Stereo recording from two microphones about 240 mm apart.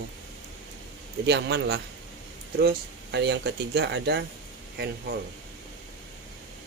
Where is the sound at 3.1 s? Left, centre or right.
Right.